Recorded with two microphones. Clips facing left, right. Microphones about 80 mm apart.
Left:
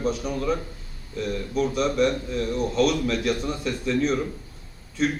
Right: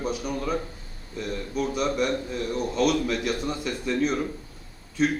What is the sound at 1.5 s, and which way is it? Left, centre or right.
Speech, centre.